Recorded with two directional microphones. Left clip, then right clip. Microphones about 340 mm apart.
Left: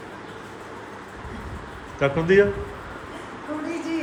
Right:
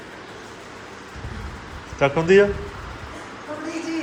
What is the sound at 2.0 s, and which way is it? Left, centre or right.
Speech, centre.